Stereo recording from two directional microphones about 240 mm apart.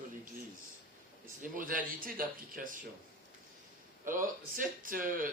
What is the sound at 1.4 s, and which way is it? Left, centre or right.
Speech, right.